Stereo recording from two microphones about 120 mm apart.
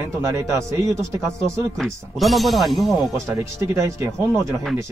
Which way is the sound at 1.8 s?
Centre (ahead or behind).